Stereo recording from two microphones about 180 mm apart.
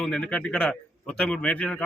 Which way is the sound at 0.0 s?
5° left (ahead or behind).